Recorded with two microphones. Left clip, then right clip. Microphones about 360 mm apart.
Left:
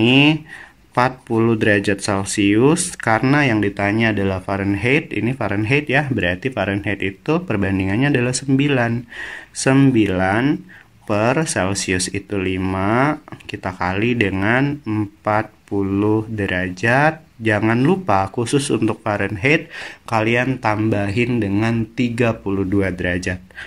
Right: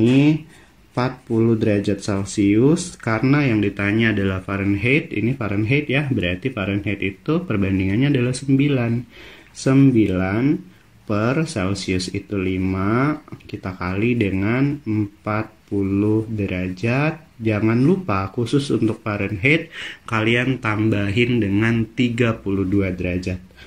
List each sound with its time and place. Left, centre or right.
0.0 s speech: left
15.7 s speech: left
16.4 s speech: centre